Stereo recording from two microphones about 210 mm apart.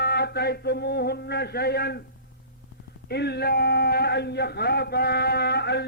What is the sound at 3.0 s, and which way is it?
A man's voice, 50° left (ahead or behind).